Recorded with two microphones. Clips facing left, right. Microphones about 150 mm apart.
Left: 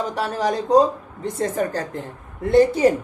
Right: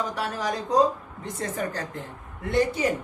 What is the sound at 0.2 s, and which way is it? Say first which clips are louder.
A woman's voice: left 6 dB; 35° left (ahead or behind).